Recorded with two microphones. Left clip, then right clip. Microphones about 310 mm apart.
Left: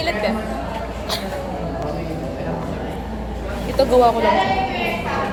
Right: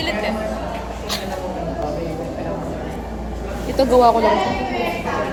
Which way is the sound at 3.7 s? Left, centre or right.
Right.